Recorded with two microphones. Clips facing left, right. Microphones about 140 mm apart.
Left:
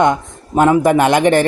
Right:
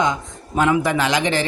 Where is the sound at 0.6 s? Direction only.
45° left (ahead or behind).